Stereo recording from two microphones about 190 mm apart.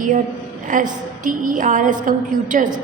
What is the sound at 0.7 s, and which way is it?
A woman's voice, 45° right (ahead or behind).